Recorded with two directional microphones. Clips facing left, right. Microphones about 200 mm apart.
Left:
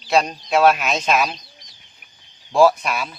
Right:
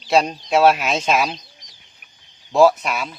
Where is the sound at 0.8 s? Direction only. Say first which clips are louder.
Even; 25° right (ahead or behind).